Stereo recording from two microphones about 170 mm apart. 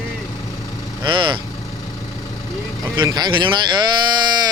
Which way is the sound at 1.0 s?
25° right (ahead or behind).